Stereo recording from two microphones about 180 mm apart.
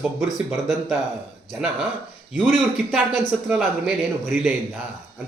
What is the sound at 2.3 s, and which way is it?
Speech, centre (ahead or behind).